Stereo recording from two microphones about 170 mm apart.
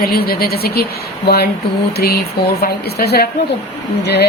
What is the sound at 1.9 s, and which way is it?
A woman's voice, 65° left (ahead or behind).